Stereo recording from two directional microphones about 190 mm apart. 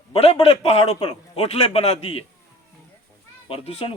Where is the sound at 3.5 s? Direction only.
30° left (ahead or behind).